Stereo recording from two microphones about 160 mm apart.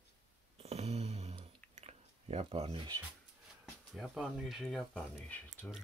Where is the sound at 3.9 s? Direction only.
Centre (ahead or behind).